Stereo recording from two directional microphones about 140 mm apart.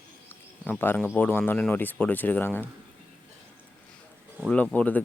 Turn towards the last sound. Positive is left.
turn(degrees=10)  # may be behind; listen again after turning